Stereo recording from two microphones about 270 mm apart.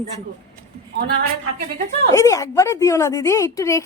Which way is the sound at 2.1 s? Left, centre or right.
Centre.